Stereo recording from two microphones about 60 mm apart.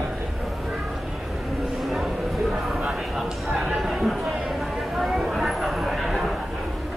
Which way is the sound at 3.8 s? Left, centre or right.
Centre.